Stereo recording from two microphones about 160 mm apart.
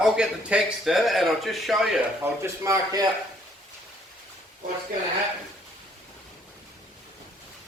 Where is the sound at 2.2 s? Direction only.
15° right (ahead or behind).